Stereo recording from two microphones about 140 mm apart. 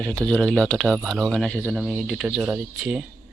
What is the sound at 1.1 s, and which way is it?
Speech, 5° left (ahead or behind).